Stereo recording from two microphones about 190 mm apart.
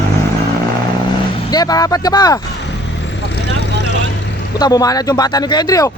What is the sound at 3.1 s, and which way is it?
Vehicle, 65° left (ahead or behind).